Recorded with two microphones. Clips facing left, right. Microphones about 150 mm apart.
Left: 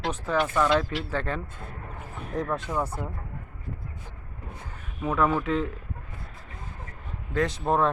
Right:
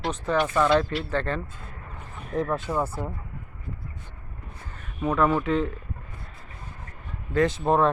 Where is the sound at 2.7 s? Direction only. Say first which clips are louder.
Right 2 dB; 10° right (ahead or behind).